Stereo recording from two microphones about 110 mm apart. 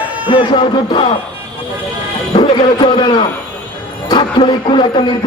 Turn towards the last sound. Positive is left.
turn(degrees=45)  # may be behind; listen again after turning